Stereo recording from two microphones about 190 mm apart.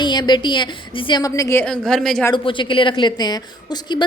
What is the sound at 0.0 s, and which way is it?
A woman's voice, 25° left (ahead or behind).